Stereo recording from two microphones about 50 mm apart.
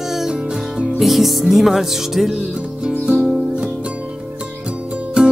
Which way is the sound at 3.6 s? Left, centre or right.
Right.